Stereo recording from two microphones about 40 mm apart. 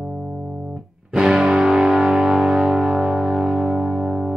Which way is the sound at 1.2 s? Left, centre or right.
Centre.